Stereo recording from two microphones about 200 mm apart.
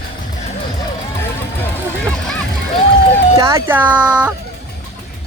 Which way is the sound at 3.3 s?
15° right (ahead or behind).